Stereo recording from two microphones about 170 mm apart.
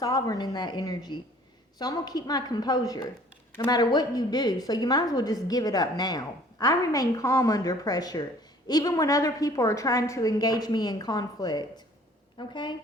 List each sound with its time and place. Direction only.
0.0 s a woman's voice: 20° left (ahead or behind)